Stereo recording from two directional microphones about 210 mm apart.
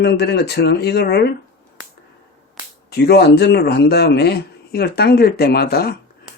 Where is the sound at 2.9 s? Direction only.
50° left (ahead or behind).